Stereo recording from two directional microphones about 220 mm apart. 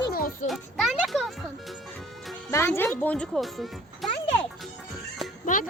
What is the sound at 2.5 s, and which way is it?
Speech, 10° left (ahead or behind).